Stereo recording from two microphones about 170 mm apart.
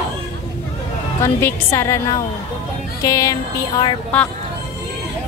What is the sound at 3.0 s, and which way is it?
Music, 20° left (ahead or behind).